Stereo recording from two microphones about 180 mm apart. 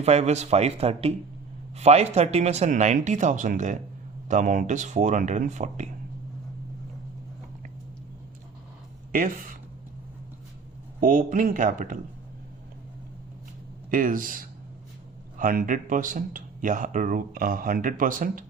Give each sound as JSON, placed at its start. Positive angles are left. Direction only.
{"t": 0.0, "sound": "speech", "side_deg": -35}
{"t": 9.1, "sound": "speech", "side_deg": -50}
{"t": 11.0, "sound": "speech", "side_deg": -45}
{"t": 13.9, "sound": "speech", "side_deg": -50}